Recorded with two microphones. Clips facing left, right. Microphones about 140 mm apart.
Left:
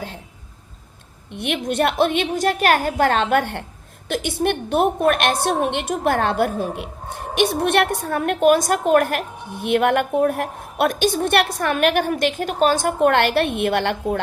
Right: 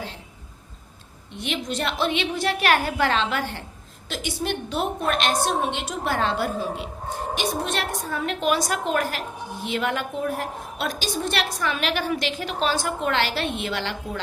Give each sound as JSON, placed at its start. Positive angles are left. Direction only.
{"t": 1.3, "sound": "a woman's voice", "side_deg": 55}